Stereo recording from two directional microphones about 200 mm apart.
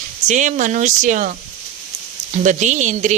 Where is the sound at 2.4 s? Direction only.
35° right (ahead or behind).